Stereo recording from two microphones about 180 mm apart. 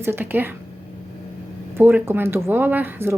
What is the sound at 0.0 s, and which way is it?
Speech, 10° right (ahead or behind).